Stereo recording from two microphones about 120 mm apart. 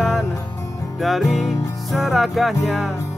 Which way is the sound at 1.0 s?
Centre (ahead or behind).